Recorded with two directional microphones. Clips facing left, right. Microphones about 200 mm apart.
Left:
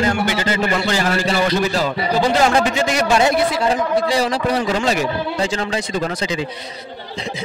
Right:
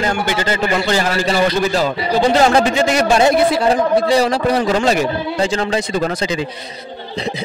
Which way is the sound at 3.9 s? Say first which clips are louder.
Right 4 dB; 55° right (ahead or behind).